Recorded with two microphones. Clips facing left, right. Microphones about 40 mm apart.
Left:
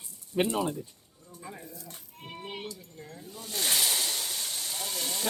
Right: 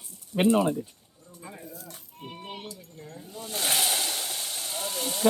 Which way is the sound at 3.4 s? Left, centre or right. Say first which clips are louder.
Right 2 dB; right.